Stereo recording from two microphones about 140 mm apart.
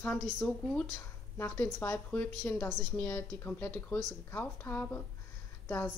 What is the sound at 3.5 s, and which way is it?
Speech, 15° left (ahead or behind).